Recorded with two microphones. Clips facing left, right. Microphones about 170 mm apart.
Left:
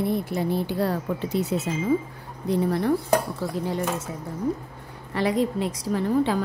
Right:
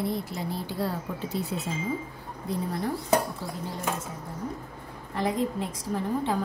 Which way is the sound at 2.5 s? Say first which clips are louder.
Left 7 dB; 70° left (ahead or behind).